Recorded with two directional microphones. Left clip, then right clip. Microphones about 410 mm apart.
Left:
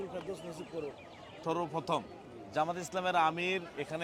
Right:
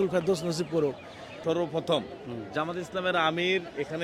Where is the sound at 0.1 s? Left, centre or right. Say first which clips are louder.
Right 14 dB; right.